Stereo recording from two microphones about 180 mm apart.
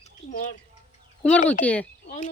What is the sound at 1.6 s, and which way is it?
Speech, 10° left (ahead or behind).